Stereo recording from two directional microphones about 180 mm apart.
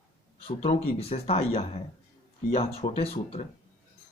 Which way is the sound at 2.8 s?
35° left (ahead or behind).